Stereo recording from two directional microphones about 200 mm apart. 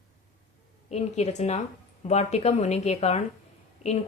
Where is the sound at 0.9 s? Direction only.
35° left (ahead or behind).